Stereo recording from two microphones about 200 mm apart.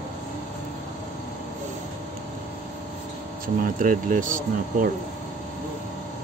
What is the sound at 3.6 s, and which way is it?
Speech, 40° right (ahead or behind).